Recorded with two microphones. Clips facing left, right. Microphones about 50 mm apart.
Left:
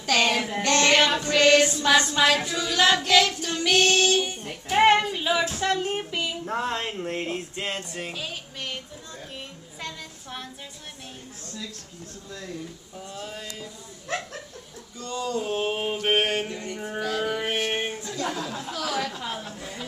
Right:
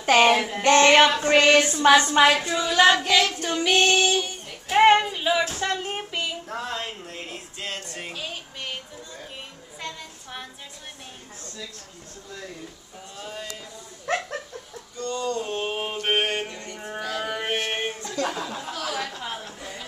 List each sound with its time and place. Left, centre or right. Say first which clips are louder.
0.0 s child singing: right 5 dB; right
0.6 s female singing: right 5 dB; right
3.1 s speech: left 1 dB; centre
3.4 s female singing: right 1 dB; centre
4.7 s child singing: right 2 dB; centre
5.5 s a sound: left 2 dB; centre
6.4 s a sound: left 3 dB; left
8.0 s female singing: left 1 dB; centre
9.8 s child singing: right 1 dB; centre
13.1 s mantra: right 1 dB; centre
15.0 s mantra: right 1 dB; centre
18.2 s speech: right 2 dB; centre
18.7 s mantra: left 3 dB; centre
19.1 s a woman's voice: left 1 dB; centre